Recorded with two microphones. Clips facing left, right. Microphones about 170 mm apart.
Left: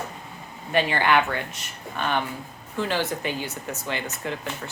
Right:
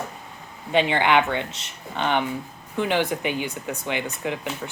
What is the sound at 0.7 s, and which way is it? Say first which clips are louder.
Speech: right 2 dB; 20° right (ahead or behind).